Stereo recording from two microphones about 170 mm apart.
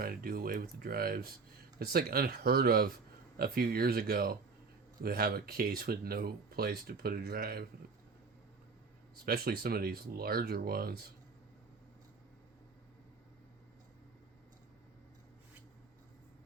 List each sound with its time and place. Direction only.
0.0 s speech: 60° right (ahead or behind)
9.1 s speech: 65° right (ahead or behind)